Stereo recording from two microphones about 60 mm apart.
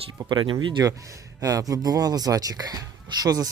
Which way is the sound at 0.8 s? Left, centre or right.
Right.